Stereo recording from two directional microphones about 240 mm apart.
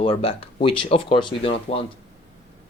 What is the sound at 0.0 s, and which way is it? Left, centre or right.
Speech, left.